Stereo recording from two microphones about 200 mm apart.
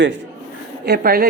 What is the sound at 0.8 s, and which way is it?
Speech, 50° right (ahead or behind).